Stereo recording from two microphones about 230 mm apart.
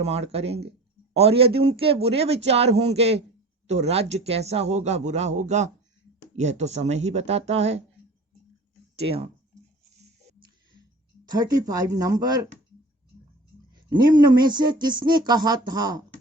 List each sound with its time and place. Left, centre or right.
0.0 s speech: right
11.3 s speech: centre
13.9 s speech: centre